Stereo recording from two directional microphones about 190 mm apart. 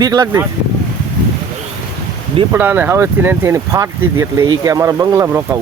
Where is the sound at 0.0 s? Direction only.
20° right (ahead or behind).